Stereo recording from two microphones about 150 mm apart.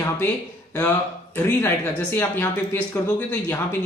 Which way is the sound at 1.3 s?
15° left (ahead or behind).